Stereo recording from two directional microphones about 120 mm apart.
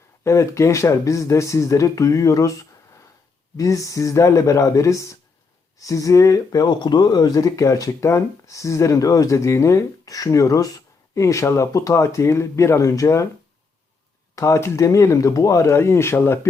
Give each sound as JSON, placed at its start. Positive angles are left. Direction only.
{"t": 0.3, "sound": "speech", "side_deg": 25}
{"t": 14.3, "sound": "speech", "side_deg": 25}